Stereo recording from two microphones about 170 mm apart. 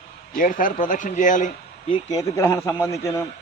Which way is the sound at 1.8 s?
30° left (ahead or behind).